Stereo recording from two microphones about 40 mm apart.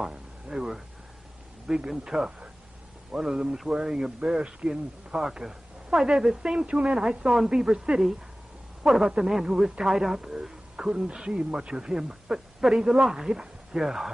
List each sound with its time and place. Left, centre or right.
0.5 s speech: centre
1.9 s speech: centre; by 7.0 s right
7.0 s speech: centre
8.8 s speech: centre